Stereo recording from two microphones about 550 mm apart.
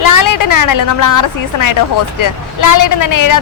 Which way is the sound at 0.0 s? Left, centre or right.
Left.